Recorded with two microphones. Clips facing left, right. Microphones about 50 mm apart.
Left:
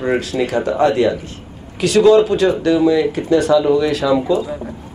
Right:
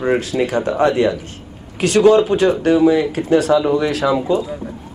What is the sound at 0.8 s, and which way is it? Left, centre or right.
Speech, right.